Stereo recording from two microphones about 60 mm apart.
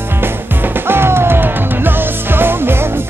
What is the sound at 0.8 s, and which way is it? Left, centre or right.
Music, right.